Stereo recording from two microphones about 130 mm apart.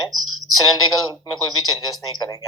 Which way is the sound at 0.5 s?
25° left (ahead or behind).